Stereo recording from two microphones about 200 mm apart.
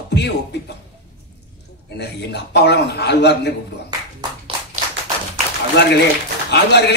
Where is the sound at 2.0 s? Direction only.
55° left (ahead or behind).